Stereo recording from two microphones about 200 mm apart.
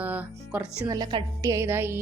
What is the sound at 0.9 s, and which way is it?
Speech, 20° right (ahead or behind).